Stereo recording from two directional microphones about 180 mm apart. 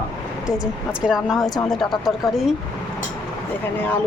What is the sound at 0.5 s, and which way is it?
A woman's voice, 5° right (ahead or behind).